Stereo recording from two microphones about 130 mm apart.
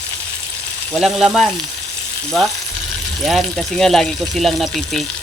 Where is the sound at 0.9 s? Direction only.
Centre (ahead or behind).